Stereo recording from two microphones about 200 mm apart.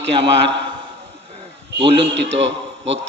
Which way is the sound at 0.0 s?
60° right (ahead or behind).